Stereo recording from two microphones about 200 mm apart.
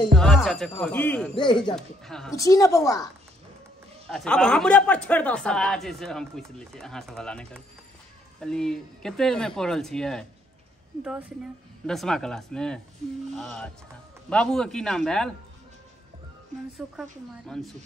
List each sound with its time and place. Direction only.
0.1 s speech: centre (ahead or behind)
1.3 s speech: 25° left (ahead or behind)
1.8 s speech: centre (ahead or behind)
2.3 s a woman's voice: 15° left (ahead or behind)
4.1 s speech: 5° left (ahead or behind)
11.8 s speech: centre (ahead or behind)
17.5 s speech: centre (ahead or behind)